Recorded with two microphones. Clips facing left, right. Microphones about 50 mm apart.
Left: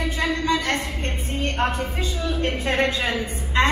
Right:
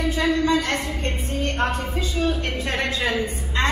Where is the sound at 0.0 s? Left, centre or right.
Left.